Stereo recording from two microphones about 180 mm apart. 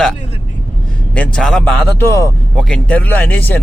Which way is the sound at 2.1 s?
15° left (ahead or behind).